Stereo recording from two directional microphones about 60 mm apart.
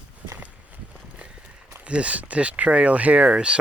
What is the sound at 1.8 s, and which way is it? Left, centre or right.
Speech, right.